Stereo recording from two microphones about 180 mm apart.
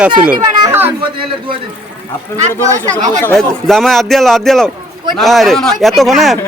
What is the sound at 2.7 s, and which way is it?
Speech, 20° right (ahead or behind).